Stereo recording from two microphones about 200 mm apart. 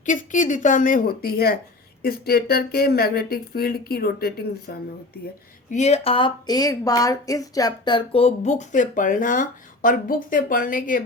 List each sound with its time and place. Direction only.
0.0 s speech: 40° left (ahead or behind)
5.7 s speech: 35° left (ahead or behind)